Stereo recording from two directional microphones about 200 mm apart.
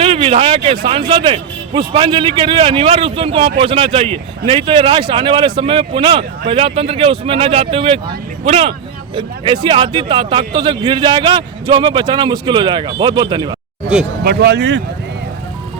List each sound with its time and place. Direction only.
0.0 s a sound: 30° right (ahead or behind)
0.9 s speech: 25° right (ahead or behind)
14.3 s speech: 55° right (ahead or behind)